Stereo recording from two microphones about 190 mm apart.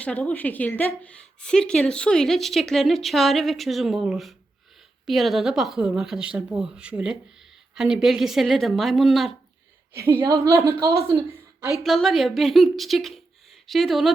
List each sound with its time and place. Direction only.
0.0 s a woman's voice: 5° left (ahead or behind)
9.9 s a woman's voice: 10° right (ahead or behind)
11.8 s a woman's voice: centre (ahead or behind)